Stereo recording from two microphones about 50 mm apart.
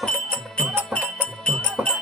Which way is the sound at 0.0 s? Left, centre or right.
Centre.